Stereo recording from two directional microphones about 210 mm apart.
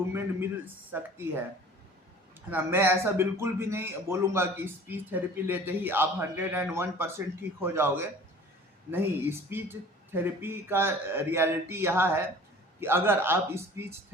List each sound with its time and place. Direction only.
0.9 s speech: 10° right (ahead or behind)
2.5 s speech: 10° right (ahead or behind)